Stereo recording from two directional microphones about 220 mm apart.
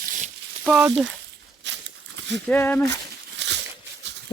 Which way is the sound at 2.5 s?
10° left (ahead or behind).